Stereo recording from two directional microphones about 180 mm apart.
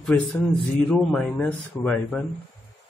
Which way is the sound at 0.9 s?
5° left (ahead or behind).